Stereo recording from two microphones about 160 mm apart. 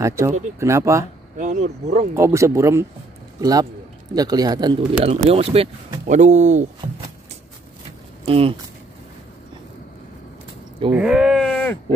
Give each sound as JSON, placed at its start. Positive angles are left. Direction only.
{"t": 0.0, "sound": "speech", "side_deg": -20}
{"t": 1.4, "sound": "speech", "side_deg": -45}
{"t": 2.1, "sound": "a man's voice", "side_deg": -20}
{"t": 5.3, "sound": "speech", "side_deg": -40}
{"t": 6.0, "sound": "speech", "side_deg": -50}
{"t": 8.3, "sound": "speech", "side_deg": -35}
{"t": 10.9, "sound": "speech", "side_deg": -10}